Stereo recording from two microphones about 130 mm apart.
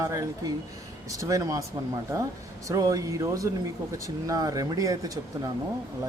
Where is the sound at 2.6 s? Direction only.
25° right (ahead or behind).